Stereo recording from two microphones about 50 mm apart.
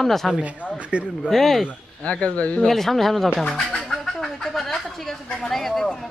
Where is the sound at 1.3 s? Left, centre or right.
Centre.